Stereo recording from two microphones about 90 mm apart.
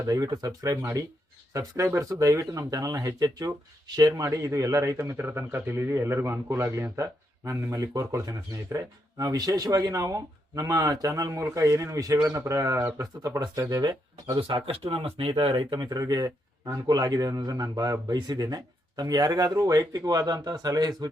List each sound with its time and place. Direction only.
0.0 s speech: 40° right (ahead or behind)
4.2 s speech: 35° right (ahead or behind)
14.3 s speech: 65° right (ahead or behind)
15.8 s speech: 45° right (ahead or behind)